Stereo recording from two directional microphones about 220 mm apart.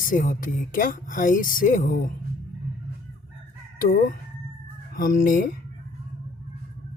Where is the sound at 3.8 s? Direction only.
40° left (ahead or behind).